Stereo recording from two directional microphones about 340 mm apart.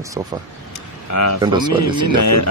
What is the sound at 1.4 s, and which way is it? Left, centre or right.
Speech, centre.